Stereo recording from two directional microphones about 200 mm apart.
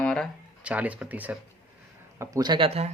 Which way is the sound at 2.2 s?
20° right (ahead or behind).